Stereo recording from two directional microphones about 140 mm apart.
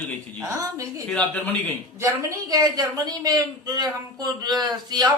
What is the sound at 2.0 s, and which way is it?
A woman's voice, 25° right (ahead or behind).